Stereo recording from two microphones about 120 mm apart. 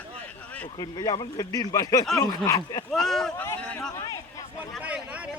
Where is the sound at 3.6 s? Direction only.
5° left (ahead or behind).